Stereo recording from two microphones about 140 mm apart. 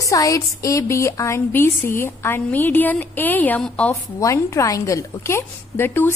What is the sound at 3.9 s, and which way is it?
A woman's voice, 20° left (ahead or behind).